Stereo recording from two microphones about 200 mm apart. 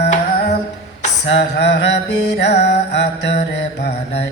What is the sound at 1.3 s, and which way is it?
Mantra, 60° left (ahead or behind).